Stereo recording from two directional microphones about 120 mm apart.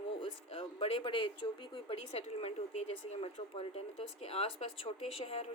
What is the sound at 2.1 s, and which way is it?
Speech, 60° left (ahead or behind).